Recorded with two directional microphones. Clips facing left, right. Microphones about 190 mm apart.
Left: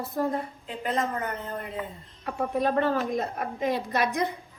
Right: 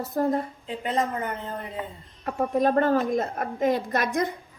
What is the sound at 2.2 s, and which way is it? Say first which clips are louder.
A woman's voice: right 3 dB; 45° right (ahead or behind).